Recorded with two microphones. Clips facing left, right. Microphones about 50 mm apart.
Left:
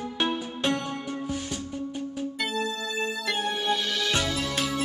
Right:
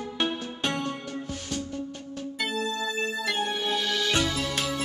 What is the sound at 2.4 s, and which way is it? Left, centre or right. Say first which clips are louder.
Music: right 2 dB; centre.